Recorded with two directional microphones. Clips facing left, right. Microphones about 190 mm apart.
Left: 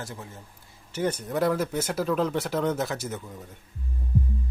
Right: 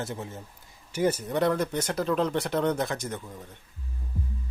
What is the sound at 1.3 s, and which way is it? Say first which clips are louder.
Speech: even; 5° left (ahead or behind).